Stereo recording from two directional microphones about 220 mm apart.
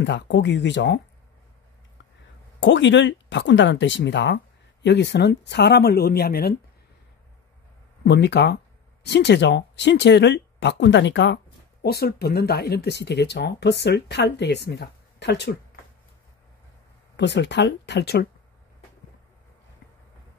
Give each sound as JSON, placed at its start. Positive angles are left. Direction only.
{"t": 0.0, "sound": "speech", "side_deg": 55}
{"t": 2.6, "sound": "speech", "side_deg": 55}
{"t": 8.0, "sound": "speech", "side_deg": 50}
{"t": 17.2, "sound": "speech", "side_deg": 55}